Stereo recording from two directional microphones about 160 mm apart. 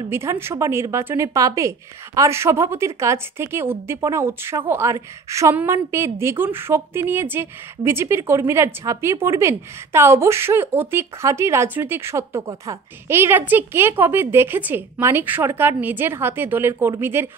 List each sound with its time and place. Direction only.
0.1 s speech: 15° right (ahead or behind)